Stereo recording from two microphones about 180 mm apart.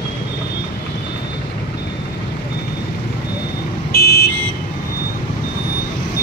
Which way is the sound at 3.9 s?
60° left (ahead or behind).